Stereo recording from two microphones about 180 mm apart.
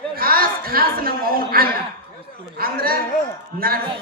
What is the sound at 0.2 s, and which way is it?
A woman's voice, 55° right (ahead or behind).